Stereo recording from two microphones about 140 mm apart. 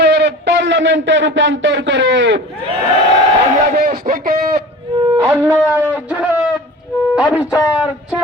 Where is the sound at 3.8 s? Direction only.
80° right.